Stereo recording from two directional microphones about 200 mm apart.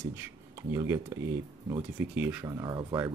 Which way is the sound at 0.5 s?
15° right (ahead or behind).